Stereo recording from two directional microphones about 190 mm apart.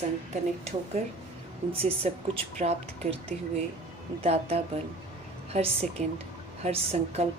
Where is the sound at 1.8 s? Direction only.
30° right (ahead or behind).